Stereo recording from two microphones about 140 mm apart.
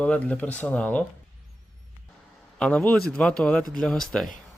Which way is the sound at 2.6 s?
10° left (ahead or behind).